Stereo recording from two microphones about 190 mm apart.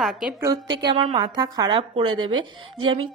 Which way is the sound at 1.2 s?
20° right (ahead or behind).